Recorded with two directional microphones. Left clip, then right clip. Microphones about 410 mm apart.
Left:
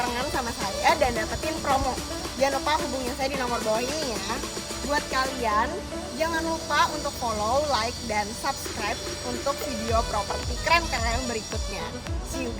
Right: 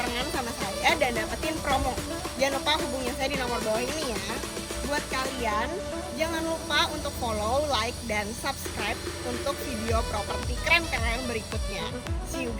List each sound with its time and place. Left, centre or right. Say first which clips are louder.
0.0 s music: left 2 dB; centre
5.1 s music: left 5 dB; centre